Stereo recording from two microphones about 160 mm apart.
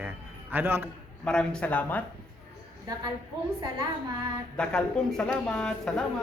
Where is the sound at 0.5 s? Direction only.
15° right (ahead or behind).